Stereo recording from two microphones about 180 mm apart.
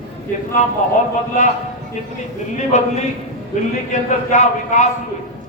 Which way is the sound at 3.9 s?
40° left (ahead or behind).